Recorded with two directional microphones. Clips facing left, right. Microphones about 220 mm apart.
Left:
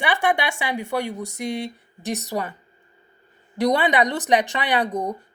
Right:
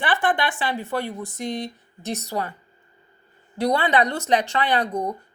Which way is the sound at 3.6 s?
20° left (ahead or behind).